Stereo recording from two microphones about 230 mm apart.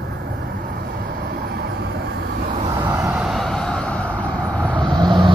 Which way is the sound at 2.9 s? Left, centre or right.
Centre.